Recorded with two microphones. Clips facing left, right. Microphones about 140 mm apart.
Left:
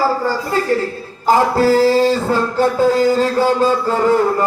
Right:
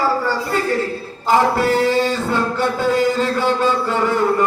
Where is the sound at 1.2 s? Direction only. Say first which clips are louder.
Left 3 dB; 35° left (ahead or behind).